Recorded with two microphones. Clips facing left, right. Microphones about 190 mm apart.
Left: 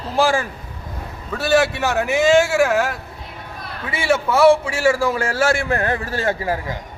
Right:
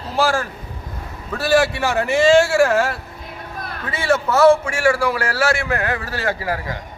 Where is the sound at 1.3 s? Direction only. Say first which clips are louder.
Even; centre (ahead or behind).